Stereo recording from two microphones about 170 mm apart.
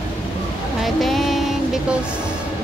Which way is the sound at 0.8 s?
Centre (ahead or behind).